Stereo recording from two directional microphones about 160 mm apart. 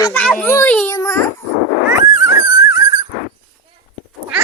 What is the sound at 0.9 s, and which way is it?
Speech, 20° left (ahead or behind).